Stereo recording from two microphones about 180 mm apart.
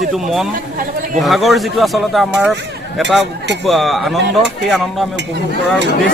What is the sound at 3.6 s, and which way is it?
Speech, centre (ahead or behind).